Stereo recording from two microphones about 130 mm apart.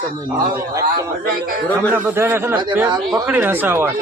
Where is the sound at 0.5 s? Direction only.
25° right (ahead or behind).